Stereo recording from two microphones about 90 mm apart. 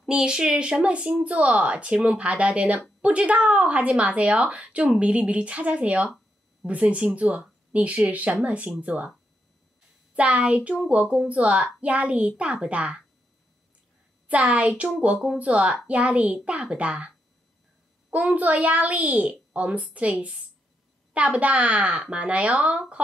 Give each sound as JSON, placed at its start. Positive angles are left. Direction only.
{"t": 0.0, "sound": "a woman's voice", "side_deg": -5}
{"t": 10.1, "sound": "a woman's voice", "side_deg": -15}
{"t": 14.2, "sound": "a woman's voice", "side_deg": -15}
{"t": 18.1, "sound": "a woman's voice", "side_deg": -15}